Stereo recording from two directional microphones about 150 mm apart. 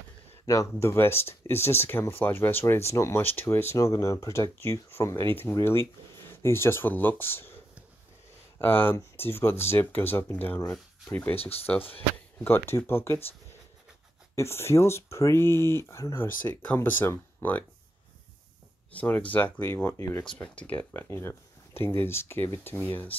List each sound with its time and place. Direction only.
0.5 s speech: 20° left (ahead or behind)
8.5 s speech: 15° left (ahead or behind)
14.3 s speech: 15° left (ahead or behind)
18.9 s speech: 10° left (ahead or behind)